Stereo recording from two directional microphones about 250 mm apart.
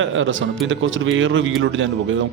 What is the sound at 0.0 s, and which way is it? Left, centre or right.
Speech, right.